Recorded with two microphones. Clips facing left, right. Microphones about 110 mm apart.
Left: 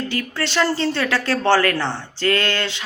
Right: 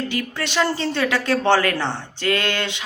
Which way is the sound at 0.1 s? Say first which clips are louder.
Left 1 dB; 15° right (ahead or behind).